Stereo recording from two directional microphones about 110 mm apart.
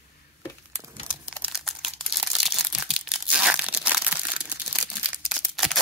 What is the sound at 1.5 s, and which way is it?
Crumpling, centre (ahead or behind).